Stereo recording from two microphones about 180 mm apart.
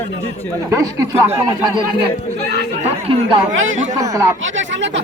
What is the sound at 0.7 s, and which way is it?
Speech, 20° right (ahead or behind).